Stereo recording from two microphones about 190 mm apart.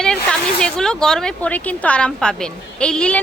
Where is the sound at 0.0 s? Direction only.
5° left (ahead or behind).